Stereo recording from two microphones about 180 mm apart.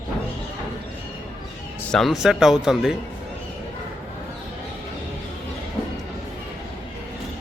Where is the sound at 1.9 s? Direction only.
Centre (ahead or behind).